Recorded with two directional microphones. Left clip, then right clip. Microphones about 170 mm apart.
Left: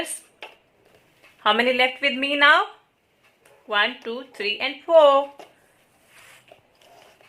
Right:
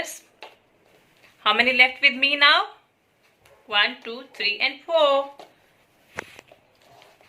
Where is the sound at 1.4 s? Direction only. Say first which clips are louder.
Right 1 dB; 50° left (ahead or behind).